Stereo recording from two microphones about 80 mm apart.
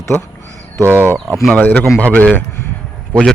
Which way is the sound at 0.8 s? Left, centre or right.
Right.